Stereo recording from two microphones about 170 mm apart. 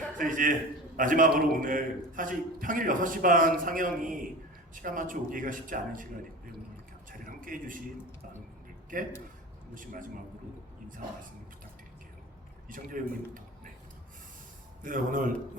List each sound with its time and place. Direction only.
0.2 s a man's voice: 50° right (ahead or behind)
7.3 s a man's voice: 55° right (ahead or behind)
8.9 s a man's voice: 50° right (ahead or behind)
12.6 s a man's voice: 50° right (ahead or behind)
14.8 s a man's voice: 55° right (ahead or behind)